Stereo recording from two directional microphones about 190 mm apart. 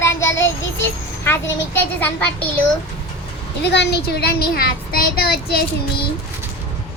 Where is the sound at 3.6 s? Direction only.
65° left (ahead or behind).